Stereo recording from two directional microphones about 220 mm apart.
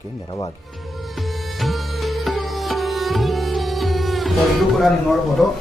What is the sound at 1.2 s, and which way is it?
Music, centre (ahead or behind).